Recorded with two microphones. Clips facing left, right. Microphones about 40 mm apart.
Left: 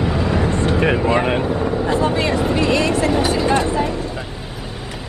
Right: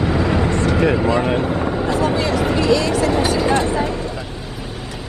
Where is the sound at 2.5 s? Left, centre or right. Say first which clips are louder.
Right 2 dB; left.